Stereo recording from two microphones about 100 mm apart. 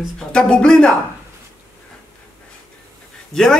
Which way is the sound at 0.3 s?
10° left (ahead or behind).